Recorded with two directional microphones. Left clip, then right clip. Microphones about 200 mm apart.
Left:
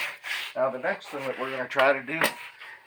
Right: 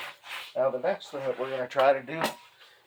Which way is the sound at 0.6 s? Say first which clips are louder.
Right 2 dB; 25° right (ahead or behind).